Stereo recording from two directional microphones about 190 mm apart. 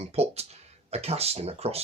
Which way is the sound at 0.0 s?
35° right (ahead or behind).